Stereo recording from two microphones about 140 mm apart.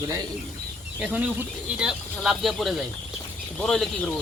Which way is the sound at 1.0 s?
10° right (ahead or behind).